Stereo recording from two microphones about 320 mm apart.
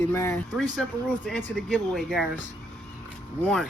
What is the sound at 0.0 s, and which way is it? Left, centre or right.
Speech, centre.